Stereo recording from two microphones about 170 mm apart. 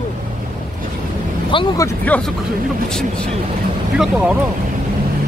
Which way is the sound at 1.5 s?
30° left (ahead or behind).